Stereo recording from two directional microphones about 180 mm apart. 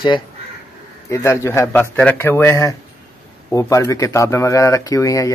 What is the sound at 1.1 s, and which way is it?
Speech, 15° left (ahead or behind).